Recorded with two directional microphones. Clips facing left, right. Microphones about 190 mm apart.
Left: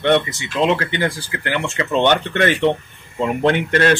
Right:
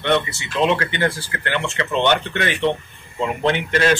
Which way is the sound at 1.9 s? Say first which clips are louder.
Left 3 dB; 45° left (ahead or behind).